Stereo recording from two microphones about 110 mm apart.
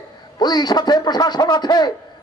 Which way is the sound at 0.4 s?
40° left (ahead or behind).